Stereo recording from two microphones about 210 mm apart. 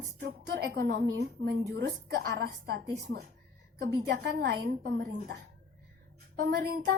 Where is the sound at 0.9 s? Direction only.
55° right (ahead or behind).